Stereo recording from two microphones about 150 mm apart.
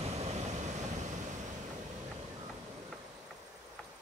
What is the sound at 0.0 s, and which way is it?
Vehicle, 45° right (ahead or behind).